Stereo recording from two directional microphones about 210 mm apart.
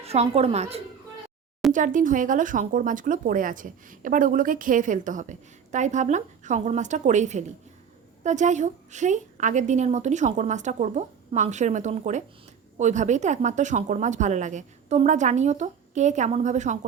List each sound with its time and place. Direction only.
0.0 s a woman's voice: 30° right (ahead or behind)